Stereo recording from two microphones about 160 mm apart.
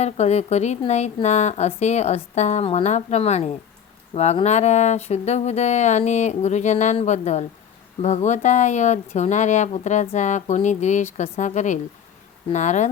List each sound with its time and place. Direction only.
0.0 s speech: 45° left (ahead or behind)